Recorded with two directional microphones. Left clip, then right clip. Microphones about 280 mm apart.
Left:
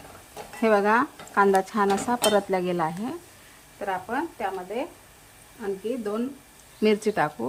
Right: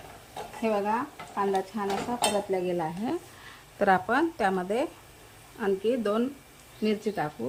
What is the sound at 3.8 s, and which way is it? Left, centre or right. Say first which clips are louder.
Speech: right 5 dB; right.